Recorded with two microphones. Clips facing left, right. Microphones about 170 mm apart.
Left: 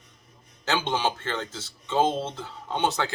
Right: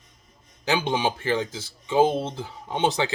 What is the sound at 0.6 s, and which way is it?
Speech, 15° right (ahead or behind).